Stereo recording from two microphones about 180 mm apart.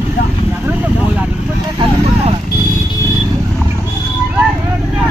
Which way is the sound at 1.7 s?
35° right (ahead or behind).